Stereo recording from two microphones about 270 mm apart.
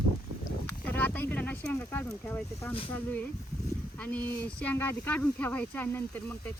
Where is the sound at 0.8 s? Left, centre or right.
Centre.